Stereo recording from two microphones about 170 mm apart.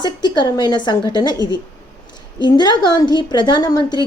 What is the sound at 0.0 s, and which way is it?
A woman's voice, 25° left (ahead or behind).